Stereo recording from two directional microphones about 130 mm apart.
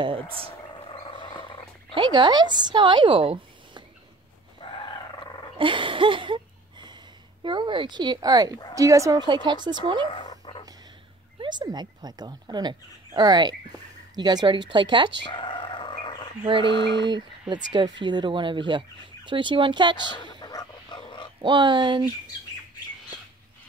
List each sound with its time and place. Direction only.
0.0 s speech: 45° right (ahead or behind)
2.0 s speech: 35° right (ahead or behind)
4.6 s a sound: 40° left (ahead or behind)
5.6 s a sound: 40° right (ahead or behind)
7.4 s speech: 40° right (ahead or behind)
10.1 s dog: 40° left (ahead or behind)
11.4 s speech: 35° right (ahead or behind)
15.3 s a sound: 35° left (ahead or behind)
17.1 s speech: 35° right (ahead or behind)
20.4 s dog: 35° left (ahead or behind)
21.4 s speech: 35° right (ahead or behind)